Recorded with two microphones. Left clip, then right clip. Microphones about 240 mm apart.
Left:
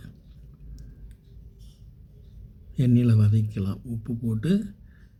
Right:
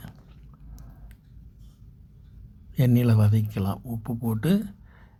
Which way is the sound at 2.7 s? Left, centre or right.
Centre.